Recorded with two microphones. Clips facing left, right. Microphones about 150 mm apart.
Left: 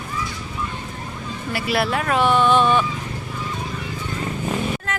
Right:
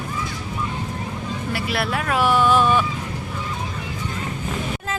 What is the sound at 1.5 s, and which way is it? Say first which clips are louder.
Speech: left 4 dB; centre (ahead or behind).